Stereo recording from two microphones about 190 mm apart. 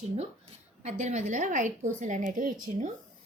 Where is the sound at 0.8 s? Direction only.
40° right (ahead or behind).